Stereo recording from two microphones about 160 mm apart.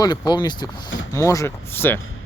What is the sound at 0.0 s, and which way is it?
Speech, 25° left (ahead or behind).